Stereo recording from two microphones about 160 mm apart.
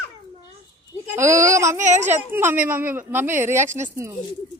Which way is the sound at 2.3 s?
15° right (ahead or behind).